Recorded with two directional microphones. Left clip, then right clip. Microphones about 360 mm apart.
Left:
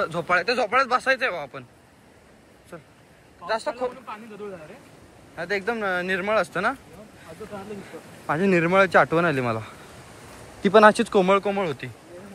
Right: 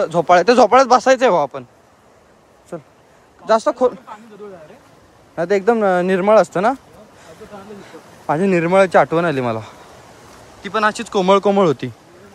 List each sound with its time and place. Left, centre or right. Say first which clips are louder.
0.0 s speech: right 10 dB; centre
2.7 s speech: right 11 dB; centre
5.3 s speech: right 11 dB; centre
8.3 s speech: right 5 dB; centre
10.6 s speech: left 3 dB; centre; by 11.9 s right